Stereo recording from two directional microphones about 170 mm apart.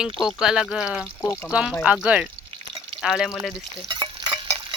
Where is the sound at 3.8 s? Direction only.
25° right (ahead or behind).